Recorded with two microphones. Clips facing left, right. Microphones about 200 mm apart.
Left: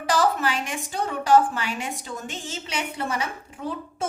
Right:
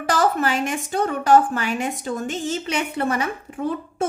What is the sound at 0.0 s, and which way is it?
A woman's voice, 50° right (ahead or behind).